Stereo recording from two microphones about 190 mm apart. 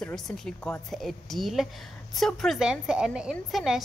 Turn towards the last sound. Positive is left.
turn(degrees=0)  # may be behind; listen again after turning